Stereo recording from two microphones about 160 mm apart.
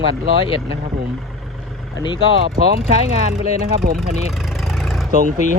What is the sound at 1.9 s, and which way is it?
Speech, 30° left (ahead or behind).